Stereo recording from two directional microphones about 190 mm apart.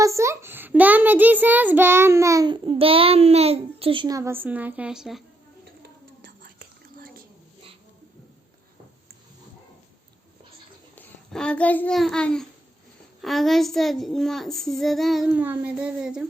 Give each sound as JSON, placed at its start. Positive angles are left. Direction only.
{"t": 0.0, "sound": "a child's voice", "side_deg": -15}
{"t": 6.2, "sound": "whispering", "side_deg": -50}
{"t": 10.9, "sound": "a child's voice", "side_deg": 5}
{"t": 13.2, "sound": "child singing", "side_deg": 0}